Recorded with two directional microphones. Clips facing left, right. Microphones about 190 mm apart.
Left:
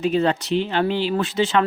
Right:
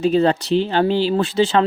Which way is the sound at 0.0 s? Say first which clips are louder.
Right 4 dB; 35° right (ahead or behind).